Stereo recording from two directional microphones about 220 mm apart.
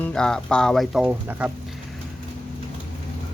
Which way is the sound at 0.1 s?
5° left (ahead or behind).